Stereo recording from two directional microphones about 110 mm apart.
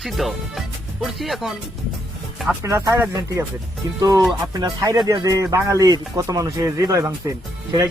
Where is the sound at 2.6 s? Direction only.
30° right (ahead or behind).